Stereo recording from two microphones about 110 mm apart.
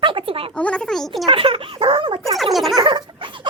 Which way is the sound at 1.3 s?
55° right (ahead or behind).